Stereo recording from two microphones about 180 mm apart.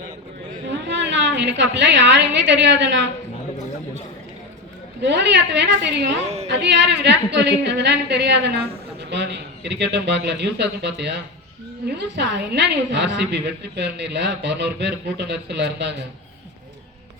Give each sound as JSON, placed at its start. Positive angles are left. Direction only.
{"t": 0.7, "sound": "a woman's voice", "side_deg": -75}
{"t": 5.0, "sound": "a woman's voice", "side_deg": -75}
{"t": 6.2, "sound": "a woman's voice", "side_deg": -35}
{"t": 6.5, "sound": "a woman's voice", "side_deg": -75}